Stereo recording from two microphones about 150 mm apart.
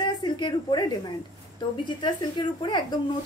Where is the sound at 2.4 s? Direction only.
30° left (ahead or behind).